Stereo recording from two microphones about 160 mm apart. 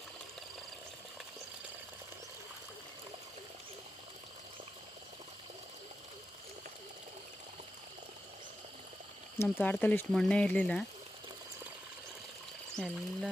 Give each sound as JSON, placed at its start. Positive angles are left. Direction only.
{"t": 9.4, "sound": "speech", "side_deg": 10}
{"t": 12.7, "sound": "speech", "side_deg": 0}